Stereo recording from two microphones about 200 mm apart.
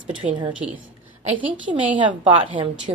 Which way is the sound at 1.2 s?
25° right (ahead or behind).